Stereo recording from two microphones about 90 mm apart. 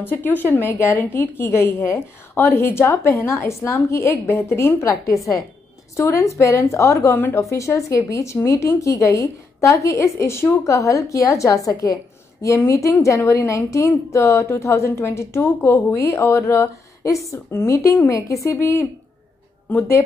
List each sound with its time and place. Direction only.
0.0 s a woman's voice: 20° left (ahead or behind)
7.5 s speech: 35° left (ahead or behind)
11.8 s a sound: 40° left (ahead or behind)
12.5 s a woman's voice: 35° left (ahead or behind)